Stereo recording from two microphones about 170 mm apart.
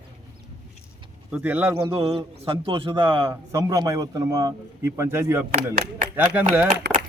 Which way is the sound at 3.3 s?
15° right (ahead or behind).